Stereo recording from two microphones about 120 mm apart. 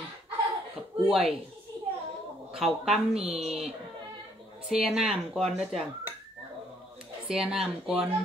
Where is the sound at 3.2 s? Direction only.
60° right (ahead or behind).